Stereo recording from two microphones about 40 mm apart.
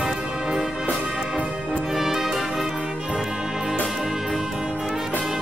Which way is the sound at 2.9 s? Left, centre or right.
Right.